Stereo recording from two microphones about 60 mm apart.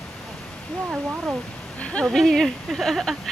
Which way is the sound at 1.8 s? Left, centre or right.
Left.